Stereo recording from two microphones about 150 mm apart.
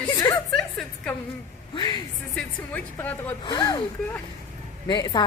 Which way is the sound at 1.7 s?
30° left (ahead or behind).